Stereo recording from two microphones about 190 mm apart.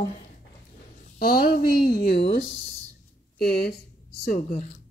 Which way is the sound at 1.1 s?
50° left (ahead or behind).